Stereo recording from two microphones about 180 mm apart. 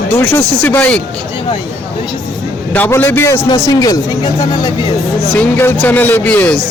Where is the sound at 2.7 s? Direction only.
10° left (ahead or behind).